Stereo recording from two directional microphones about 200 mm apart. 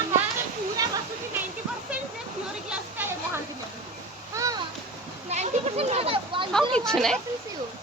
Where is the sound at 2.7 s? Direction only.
10° right (ahead or behind).